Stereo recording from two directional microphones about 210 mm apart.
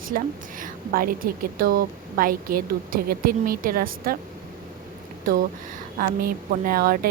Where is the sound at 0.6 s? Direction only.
40° right (ahead or behind).